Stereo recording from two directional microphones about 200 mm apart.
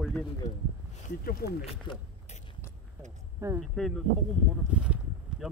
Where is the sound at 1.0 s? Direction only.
50° left (ahead or behind).